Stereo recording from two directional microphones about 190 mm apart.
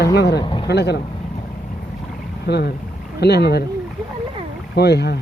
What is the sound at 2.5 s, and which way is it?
Speech, 60° left (ahead or behind).